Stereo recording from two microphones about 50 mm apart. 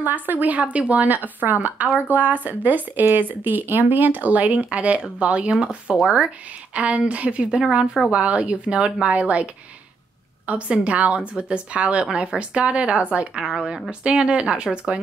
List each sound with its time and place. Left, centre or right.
0.0 s speech: right
7.6 s a woman's voice: centre
8.1 s speech: right